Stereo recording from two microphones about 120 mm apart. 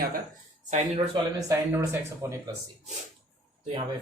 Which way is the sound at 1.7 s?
20° right (ahead or behind).